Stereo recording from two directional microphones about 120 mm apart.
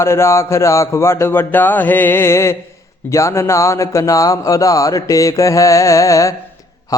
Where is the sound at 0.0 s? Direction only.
20° left (ahead or behind).